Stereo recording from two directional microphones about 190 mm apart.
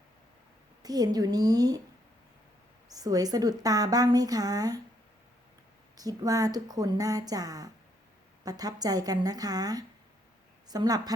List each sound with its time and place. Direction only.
0.8 s a woman's voice: 20° right (ahead or behind)
2.9 s a woman's voice: 20° right (ahead or behind)
6.0 s a woman's voice: 20° right (ahead or behind)